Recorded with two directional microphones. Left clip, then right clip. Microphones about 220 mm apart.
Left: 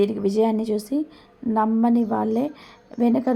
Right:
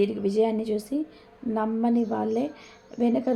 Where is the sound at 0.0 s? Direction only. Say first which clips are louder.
Left 3 dB; 30° left (ahead or behind).